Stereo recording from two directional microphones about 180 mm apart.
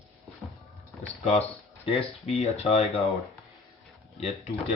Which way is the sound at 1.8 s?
35° left (ahead or behind).